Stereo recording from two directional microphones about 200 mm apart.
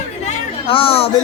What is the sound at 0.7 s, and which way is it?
Speech, 25° left (ahead or behind).